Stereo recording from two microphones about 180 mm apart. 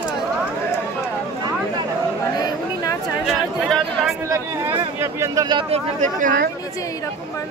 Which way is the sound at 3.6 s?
Centre (ahead or behind).